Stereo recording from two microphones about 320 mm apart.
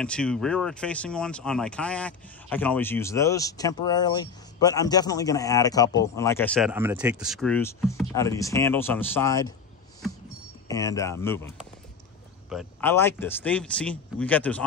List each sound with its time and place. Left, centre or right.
0.0 s speech: centre
10.7 s speech: centre